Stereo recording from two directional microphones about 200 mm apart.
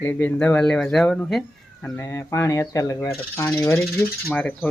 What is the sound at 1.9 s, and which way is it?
Speech, 15° left (ahead or behind).